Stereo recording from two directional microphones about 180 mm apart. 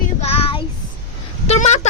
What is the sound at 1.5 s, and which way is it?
Speech, 40° left (ahead or behind).